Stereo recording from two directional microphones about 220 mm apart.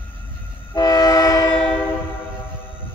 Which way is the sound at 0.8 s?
15° left (ahead or behind).